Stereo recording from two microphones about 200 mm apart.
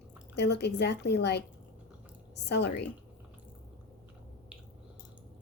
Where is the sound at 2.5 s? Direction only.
55° left (ahead or behind).